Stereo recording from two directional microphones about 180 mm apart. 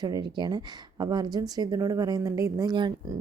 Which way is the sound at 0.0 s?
25° right (ahead or behind).